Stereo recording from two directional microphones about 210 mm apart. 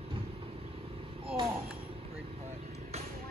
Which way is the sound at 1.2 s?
25° right (ahead or behind).